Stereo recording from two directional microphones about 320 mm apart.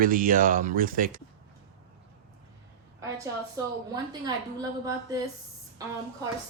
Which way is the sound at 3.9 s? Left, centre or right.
Centre.